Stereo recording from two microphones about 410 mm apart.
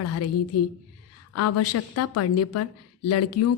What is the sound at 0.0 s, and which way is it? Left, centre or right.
A woman's voice, left.